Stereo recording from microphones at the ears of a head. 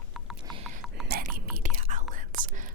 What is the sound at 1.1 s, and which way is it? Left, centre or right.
Whispering, right.